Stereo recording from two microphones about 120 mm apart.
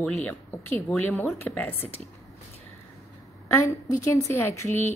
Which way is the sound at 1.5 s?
10° left (ahead or behind).